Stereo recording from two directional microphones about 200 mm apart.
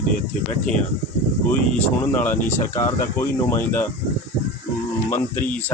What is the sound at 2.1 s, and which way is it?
Speech, 10° left (ahead or behind).